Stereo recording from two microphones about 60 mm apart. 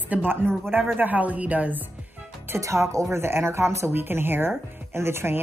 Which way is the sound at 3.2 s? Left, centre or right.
Right.